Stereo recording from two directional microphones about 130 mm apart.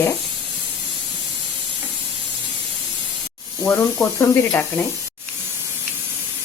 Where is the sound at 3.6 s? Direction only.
20° left (ahead or behind).